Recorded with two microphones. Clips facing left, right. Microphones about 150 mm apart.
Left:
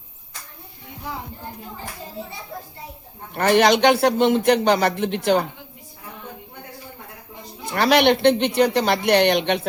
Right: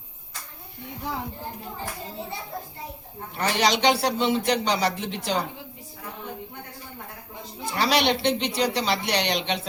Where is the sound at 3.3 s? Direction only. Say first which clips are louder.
Left 7 dB; 55° left (ahead or behind).